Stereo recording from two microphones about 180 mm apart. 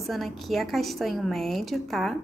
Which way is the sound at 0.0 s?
Centre (ahead or behind).